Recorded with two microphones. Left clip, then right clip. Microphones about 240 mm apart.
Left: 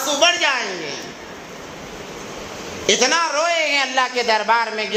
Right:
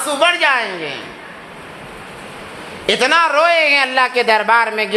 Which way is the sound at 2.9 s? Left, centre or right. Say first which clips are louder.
Right 4 dB; right.